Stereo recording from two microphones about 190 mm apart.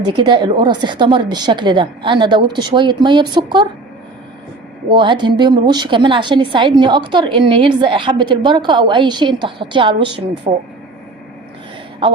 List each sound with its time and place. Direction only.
0.0 s a woman's voice: 25° right (ahead or behind)
4.9 s a woman's voice: 25° right (ahead or behind)